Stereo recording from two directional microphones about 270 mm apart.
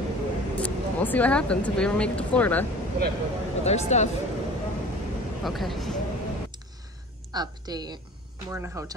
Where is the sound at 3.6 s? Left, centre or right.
Left.